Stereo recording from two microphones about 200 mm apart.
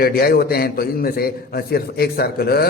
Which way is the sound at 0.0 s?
50° left (ahead or behind).